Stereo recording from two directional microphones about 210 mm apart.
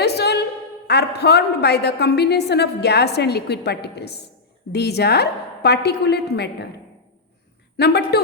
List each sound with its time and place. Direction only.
0.0 s a sound: 50° left (ahead or behind)
0.9 s a woman's voice: 50° left (ahead or behind)
7.8 s a woman's voice: 50° left (ahead or behind)